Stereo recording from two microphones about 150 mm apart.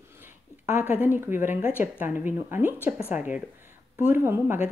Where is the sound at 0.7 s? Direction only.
10° right (ahead or behind).